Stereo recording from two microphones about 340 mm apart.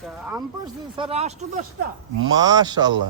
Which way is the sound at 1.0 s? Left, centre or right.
Centre.